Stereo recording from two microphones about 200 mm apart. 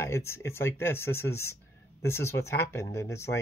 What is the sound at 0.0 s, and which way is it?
Speech, 15° left (ahead or behind).